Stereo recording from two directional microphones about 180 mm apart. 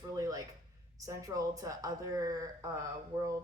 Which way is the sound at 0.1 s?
20° right (ahead or behind).